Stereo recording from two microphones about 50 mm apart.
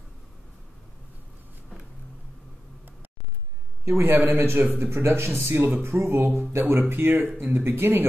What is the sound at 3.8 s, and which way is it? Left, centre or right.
A man's voice, right.